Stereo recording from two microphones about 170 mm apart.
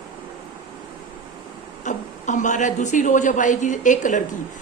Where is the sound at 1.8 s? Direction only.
45° left (ahead or behind).